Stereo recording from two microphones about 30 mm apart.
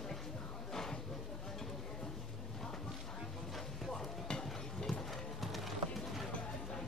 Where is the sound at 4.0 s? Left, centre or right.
Centre.